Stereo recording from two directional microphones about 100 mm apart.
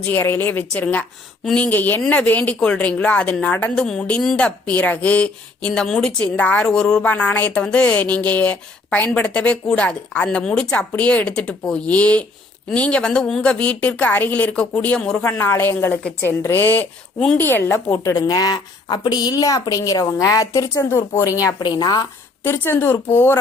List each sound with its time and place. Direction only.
0.1 s a woman's voice: 20° left (ahead or behind)
15.2 s a woman's voice: 20° left (ahead or behind); by 22.0 s 45° left (ahead or behind)
22.4 s a woman's voice: 25° left (ahead or behind)